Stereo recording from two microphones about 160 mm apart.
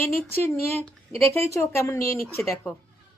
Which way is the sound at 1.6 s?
15° left (ahead or behind).